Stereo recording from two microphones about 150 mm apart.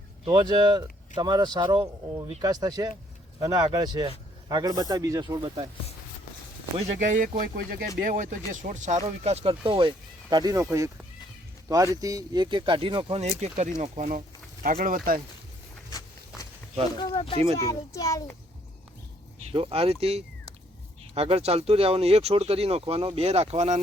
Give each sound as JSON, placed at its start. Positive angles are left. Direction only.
{"t": 0.3, "sound": "speech", "side_deg": -30}
{"t": 6.7, "sound": "speech", "side_deg": -55}
{"t": 14.6, "sound": "speech", "side_deg": -65}
{"t": 15.9, "sound": "walk", "side_deg": 25}
{"t": 17.7, "sound": "a child's voice", "side_deg": 20}
{"t": 19.5, "sound": "speech", "side_deg": -40}